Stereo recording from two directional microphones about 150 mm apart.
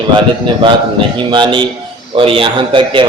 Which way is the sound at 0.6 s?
35° right (ahead or behind).